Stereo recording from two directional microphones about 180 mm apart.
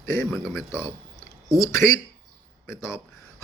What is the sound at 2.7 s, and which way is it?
Speech, 15° left (ahead or behind).